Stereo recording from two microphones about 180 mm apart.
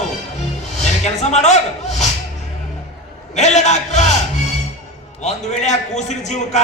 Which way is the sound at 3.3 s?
40° left (ahead or behind).